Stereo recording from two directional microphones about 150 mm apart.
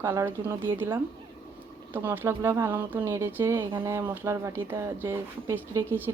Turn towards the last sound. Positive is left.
turn(degrees=-15)  # may be behind; listen again after turning